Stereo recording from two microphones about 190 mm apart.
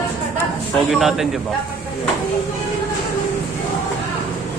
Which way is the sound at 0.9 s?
Centre (ahead or behind).